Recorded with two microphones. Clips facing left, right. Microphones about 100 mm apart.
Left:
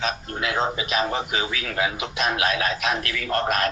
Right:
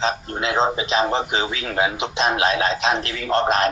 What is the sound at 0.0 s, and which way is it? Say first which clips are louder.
A man's voice: right 4 dB; 25° right (ahead or behind).